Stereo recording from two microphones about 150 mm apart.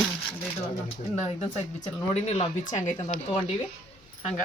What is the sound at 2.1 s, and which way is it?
Speech, 45° left (ahead or behind).